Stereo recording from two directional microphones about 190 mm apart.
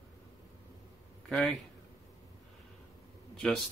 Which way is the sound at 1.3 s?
Centre (ahead or behind).